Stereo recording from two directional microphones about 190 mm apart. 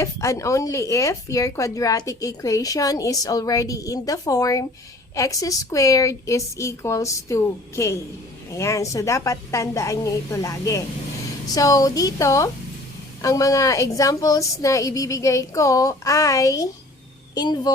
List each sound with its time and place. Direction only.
0.0 s a woman's voice: 15° left (ahead or behind)